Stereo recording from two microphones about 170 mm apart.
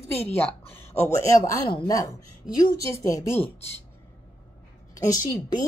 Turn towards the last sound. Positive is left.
turn(degrees=20)  # may be behind; listen again after turning